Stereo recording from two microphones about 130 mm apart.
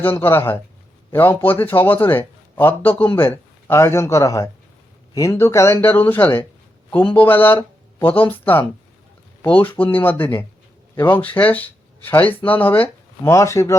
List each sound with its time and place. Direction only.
0.0 s a man's voice: 15° left (ahead or behind)